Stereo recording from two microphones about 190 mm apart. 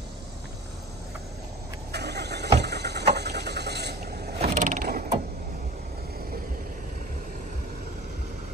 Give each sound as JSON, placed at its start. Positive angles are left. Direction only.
{"t": 1.9, "sound": "vehicle", "side_deg": -60}
{"t": 4.4, "sound": "mechanisms", "side_deg": -40}